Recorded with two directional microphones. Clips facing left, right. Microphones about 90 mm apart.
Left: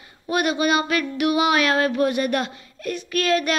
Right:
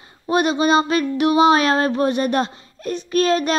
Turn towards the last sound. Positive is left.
turn(degrees=-30)  # may be behind; listen again after turning